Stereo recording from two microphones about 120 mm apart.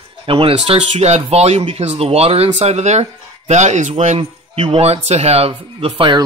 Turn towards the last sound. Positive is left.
turn(degrees=-45)  # may be behind; listen again after turning